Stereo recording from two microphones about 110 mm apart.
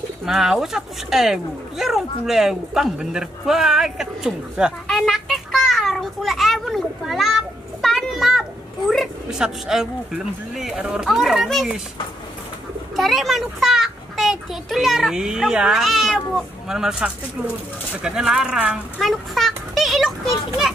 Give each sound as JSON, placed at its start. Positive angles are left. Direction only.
{"t": 0.2, "sound": "speech", "side_deg": -5}
{"t": 12.9, "sound": "a child's voice", "side_deg": 0}
{"t": 18.9, "sound": "children playing", "side_deg": 0}